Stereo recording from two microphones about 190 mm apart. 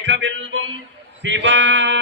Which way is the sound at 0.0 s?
70° right (ahead or behind).